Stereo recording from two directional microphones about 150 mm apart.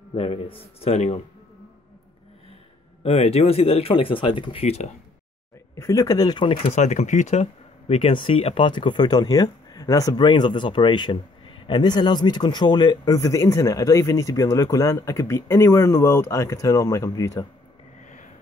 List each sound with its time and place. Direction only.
0.1 s speech: 40° left (ahead or behind)
3.0 s speech: 40° left (ahead or behind)
5.8 s speech: 20° left (ahead or behind)
6.7 s speech: 50° left (ahead or behind)
7.9 s speech: 35° left (ahead or behind)